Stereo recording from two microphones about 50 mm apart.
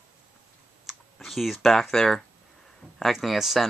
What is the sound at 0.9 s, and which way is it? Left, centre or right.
Computer keyboard, centre.